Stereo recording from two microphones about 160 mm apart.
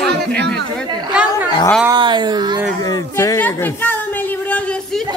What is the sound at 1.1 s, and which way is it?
Chatter, 5° right (ahead or behind).